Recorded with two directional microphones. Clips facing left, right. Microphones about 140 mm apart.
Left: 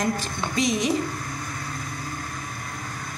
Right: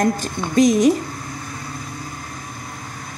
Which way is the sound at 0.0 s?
45° right (ahead or behind).